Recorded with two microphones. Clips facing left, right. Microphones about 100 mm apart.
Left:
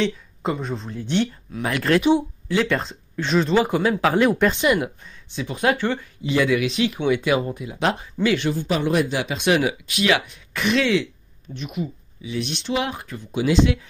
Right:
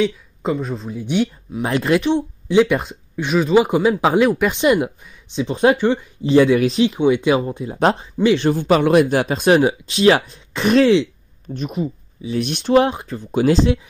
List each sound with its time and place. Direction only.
0.0 s speech: centre (ahead or behind)
1.6 s speech: 25° right (ahead or behind)
4.2 s speech: centre (ahead or behind)
4.5 s speech: 20° right (ahead or behind)
6.2 s speech: 30° right (ahead or behind)
6.9 s speech: 20° right (ahead or behind)
8.5 s speech: 70° right (ahead or behind); by 12.4 s 35° right (ahead or behind)
12.4 s speech: 50° right (ahead or behind)
12.8 s speech: 30° right (ahead or behind)
13.3 s speech: 50° right (ahead or behind)